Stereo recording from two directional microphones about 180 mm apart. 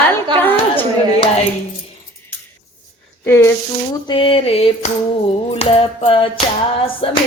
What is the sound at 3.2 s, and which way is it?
Speech, 15° left (ahead or behind).